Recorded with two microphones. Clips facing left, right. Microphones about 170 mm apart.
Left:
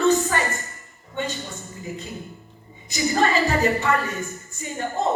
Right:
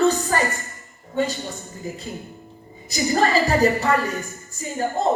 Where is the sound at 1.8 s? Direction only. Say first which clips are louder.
Right 2 dB; 35° right (ahead or behind).